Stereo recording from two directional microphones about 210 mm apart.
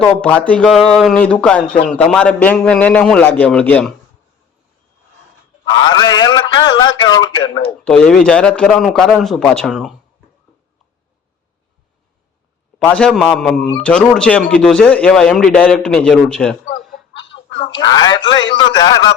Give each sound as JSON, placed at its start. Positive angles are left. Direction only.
{"t": 0.0, "sound": "a man's voice", "side_deg": 5}
{"t": 5.6, "sound": "a man's voice", "side_deg": 20}
{"t": 7.9, "sound": "speech", "side_deg": 5}
{"t": 12.8, "sound": "speech", "side_deg": 5}
{"t": 17.7, "sound": "a man's voice", "side_deg": 20}